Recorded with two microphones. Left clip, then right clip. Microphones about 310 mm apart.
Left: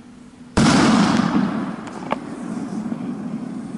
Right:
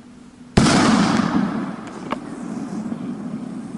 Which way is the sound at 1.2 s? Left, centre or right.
Centre.